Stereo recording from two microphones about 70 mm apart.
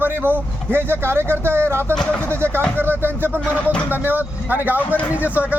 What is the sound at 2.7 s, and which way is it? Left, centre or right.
Speech, right.